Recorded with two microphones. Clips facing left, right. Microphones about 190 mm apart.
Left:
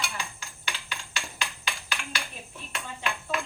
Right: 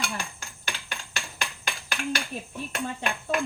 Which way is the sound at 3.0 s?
50° right (ahead or behind).